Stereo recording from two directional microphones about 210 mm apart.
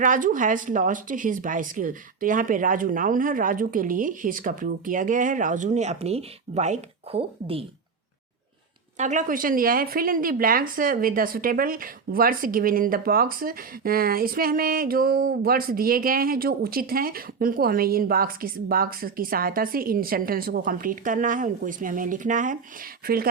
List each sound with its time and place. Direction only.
0.0 s speech: 40° right (ahead or behind)
9.0 s speech: 35° right (ahead or behind)